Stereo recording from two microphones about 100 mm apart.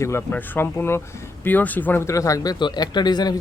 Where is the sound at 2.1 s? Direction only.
35° left (ahead or behind).